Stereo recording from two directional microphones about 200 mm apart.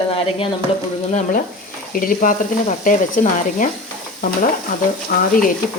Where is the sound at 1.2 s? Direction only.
45° left (ahead or behind).